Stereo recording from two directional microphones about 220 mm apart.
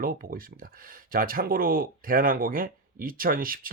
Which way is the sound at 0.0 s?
40° right (ahead or behind).